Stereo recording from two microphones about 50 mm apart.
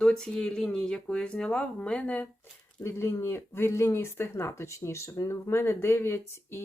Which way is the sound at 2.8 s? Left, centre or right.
Left.